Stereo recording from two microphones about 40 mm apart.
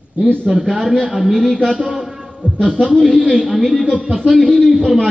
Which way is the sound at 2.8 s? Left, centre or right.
Centre.